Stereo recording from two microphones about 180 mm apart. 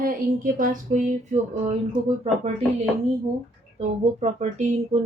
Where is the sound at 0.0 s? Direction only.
50° right (ahead or behind).